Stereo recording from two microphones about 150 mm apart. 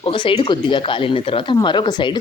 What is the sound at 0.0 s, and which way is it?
Speech, 35° left (ahead or behind).